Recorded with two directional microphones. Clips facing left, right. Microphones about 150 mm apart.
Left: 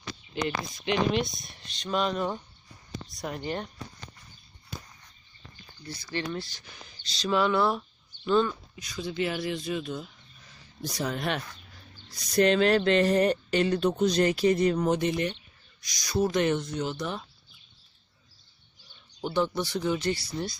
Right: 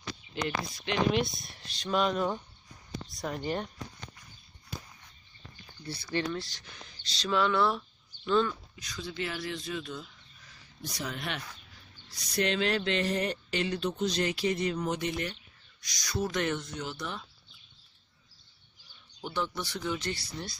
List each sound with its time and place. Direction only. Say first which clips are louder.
0.3 s speech: left 3 dB; centre (ahead or behind)
6.0 s speech: right 1 dB; 5° left (ahead or behind)
10.8 s speech: left 6 dB; 40° left (ahead or behind)
16.1 s speech: left 6 dB; 30° left (ahead or behind)
19.2 s speech: left 7 dB; 25° left (ahead or behind)
20.0 s speech: left 7 dB; 10° left (ahead or behind)